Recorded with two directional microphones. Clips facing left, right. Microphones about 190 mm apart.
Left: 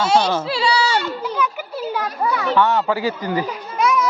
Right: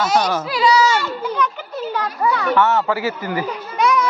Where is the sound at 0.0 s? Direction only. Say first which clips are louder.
Left 1 dB; 25° left (ahead or behind).